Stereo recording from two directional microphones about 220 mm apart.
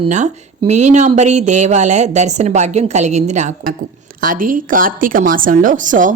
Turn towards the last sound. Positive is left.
turn(degrees=-35)  # may be behind; listen again after turning